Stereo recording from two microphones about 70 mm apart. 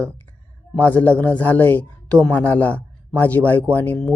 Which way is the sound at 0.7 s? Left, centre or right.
Centre.